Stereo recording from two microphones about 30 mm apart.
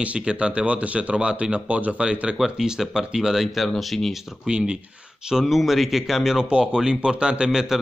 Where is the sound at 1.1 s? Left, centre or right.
Right.